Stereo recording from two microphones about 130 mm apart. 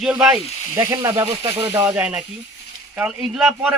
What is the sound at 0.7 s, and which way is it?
Speech, 25° right (ahead or behind).